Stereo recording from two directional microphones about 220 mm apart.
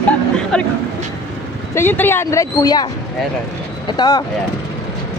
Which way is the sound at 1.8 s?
10° left (ahead or behind).